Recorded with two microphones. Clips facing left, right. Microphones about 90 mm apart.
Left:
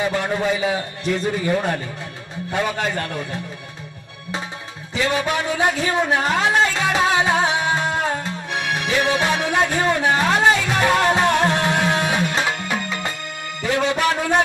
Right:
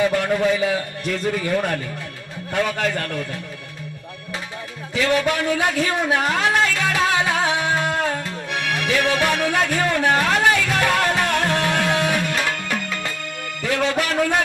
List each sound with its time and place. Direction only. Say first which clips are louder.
0.0 s a man's voice: right 2 dB; 20° left (ahead or behind)
4.9 s a man's voice: right 1 dB; 20° left (ahead or behind)